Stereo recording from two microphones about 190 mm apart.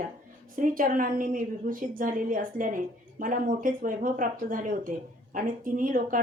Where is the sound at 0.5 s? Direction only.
45° right (ahead or behind).